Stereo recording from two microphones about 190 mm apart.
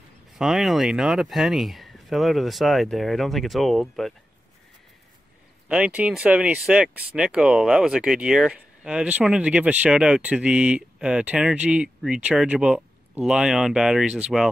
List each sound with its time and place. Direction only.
0.4 s speech: centre (ahead or behind)
5.7 s speech: 5° right (ahead or behind)